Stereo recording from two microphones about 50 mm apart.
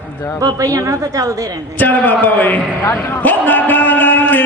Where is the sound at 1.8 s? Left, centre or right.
Left.